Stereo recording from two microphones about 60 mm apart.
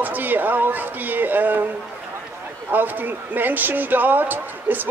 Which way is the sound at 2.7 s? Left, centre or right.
Right.